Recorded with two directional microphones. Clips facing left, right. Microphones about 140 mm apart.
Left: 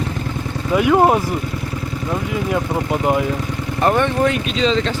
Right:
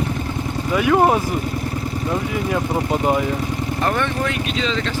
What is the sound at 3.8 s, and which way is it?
Speech, 30° left (ahead or behind).